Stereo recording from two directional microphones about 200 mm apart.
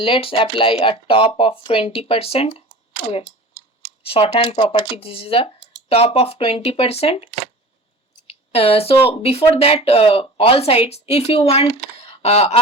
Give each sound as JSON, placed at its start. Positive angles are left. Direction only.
{"t": 0.0, "sound": "speech", "side_deg": 25}
{"t": 4.0, "sound": "speech", "side_deg": 30}
{"t": 8.3, "sound": "speech", "side_deg": 30}